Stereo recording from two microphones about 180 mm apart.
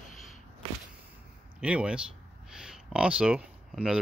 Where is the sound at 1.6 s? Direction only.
5° right (ahead or behind).